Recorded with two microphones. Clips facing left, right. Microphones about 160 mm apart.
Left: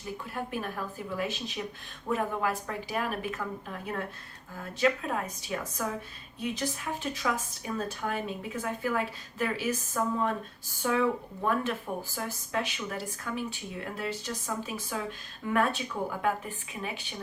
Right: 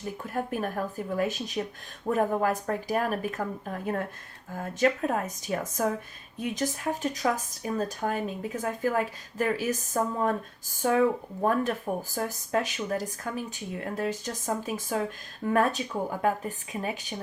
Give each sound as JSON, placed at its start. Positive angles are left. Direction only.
{"t": 0.3, "sound": "speech", "side_deg": -45}